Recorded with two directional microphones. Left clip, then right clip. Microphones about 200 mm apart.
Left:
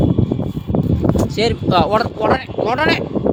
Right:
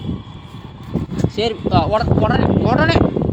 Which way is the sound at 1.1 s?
35° left (ahead or behind).